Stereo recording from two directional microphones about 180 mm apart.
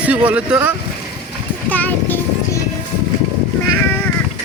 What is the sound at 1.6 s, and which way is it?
Music, 10° left (ahead or behind).